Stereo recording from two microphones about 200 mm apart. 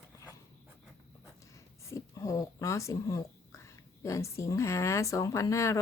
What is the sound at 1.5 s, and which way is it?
Speech, 15° left (ahead or behind).